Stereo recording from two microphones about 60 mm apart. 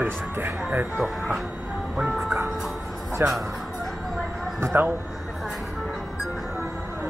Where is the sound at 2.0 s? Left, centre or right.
Centre.